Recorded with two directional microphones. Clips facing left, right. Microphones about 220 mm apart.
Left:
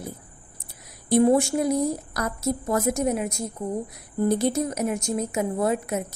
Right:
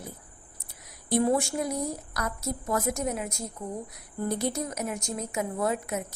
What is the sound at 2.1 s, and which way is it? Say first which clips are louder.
Speech: left 6 dB; 35° left (ahead or behind).